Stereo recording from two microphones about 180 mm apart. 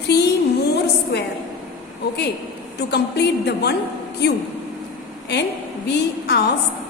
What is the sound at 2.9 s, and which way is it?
A woman's voice, 70° left (ahead or behind).